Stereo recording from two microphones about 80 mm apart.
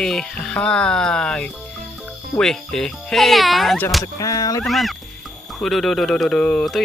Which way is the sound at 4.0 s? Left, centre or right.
Left.